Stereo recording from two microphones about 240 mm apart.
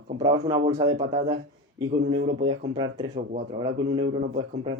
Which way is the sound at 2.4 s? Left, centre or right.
Centre.